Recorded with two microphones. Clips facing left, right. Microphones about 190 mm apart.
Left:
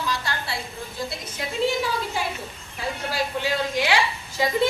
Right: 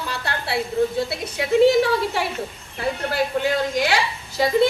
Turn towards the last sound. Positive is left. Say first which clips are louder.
# right 1 dB
turn(degrees=-45)  # may be behind; listen again after turning